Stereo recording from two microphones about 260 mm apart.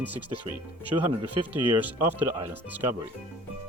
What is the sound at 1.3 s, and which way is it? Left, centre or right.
Speech, right.